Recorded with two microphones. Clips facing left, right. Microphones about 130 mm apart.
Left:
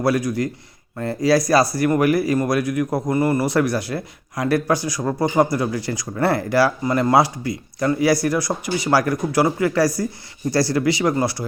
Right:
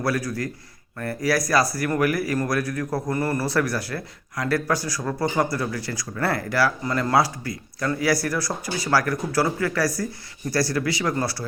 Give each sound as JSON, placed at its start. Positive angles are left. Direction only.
{"t": 0.0, "sound": "speech", "side_deg": 20}